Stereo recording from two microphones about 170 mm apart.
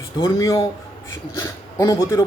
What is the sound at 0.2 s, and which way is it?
A man's voice, 20° left (ahead or behind).